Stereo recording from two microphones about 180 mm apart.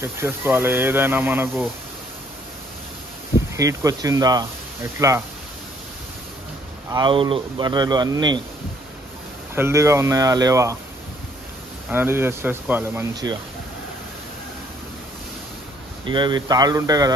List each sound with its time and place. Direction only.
0.0 s speech: 15° right (ahead or behind)
3.5 s speech: 20° right (ahead or behind)
6.9 s speech: 25° right (ahead or behind)
9.6 s speech: 15° right (ahead or behind)
11.9 s speech: 10° right (ahead or behind)
16.1 s speech: 25° right (ahead or behind)